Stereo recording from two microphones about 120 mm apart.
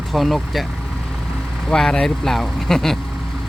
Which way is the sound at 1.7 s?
5° left (ahead or behind).